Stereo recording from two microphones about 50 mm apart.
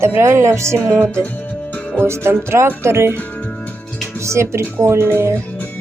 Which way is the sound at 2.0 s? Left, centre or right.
Right.